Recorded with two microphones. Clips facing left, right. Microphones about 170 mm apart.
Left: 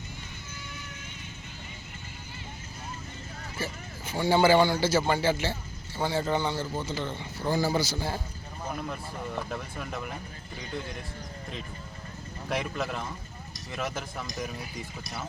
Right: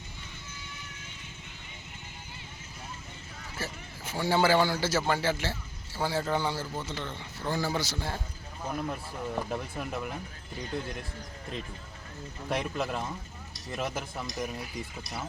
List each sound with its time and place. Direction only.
3.6 s a man's voice: centre (ahead or behind)
8.9 s speech: 10° right (ahead or behind)
12.5 s a man's voice: centre (ahead or behind)